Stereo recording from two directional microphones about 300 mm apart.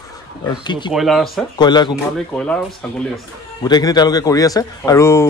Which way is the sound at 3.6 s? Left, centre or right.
Centre.